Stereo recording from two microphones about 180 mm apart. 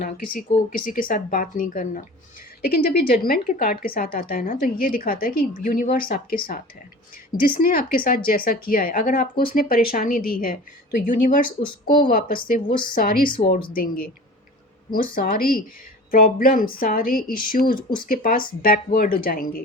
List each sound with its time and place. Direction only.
0.0 s a woman's voice: 50° left (ahead or behind)
12.6 s speech: 25° left (ahead or behind)
12.9 s a woman's voice: 55° left (ahead or behind)
15.1 s a woman's voice: 55° left (ahead or behind)